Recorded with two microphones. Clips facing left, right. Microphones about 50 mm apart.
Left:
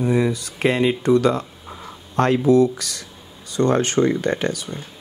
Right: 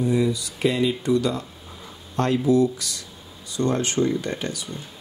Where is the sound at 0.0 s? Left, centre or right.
Left.